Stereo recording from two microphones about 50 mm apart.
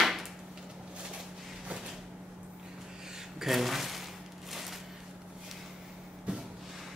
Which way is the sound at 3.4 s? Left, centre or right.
Centre.